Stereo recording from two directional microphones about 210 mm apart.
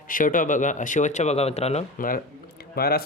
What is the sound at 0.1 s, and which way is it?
Speech, 40° left (ahead or behind).